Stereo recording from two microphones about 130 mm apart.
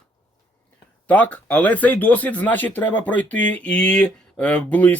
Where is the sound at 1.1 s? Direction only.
10° left (ahead or behind).